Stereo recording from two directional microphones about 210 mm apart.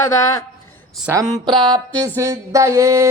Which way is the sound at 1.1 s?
15° right (ahead or behind).